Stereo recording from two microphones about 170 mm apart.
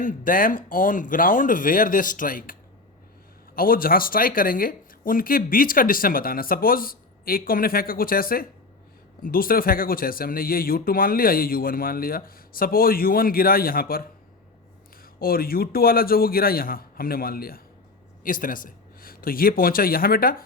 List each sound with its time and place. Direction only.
0.0 s speech: 50° left (ahead or behind)